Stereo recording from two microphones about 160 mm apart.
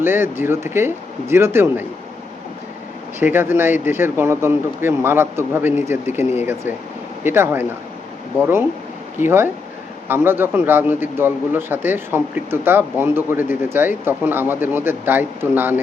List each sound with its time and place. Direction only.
0.0 s a man's voice: 15° right (ahead or behind)
3.2 s a man's voice: 15° right (ahead or behind)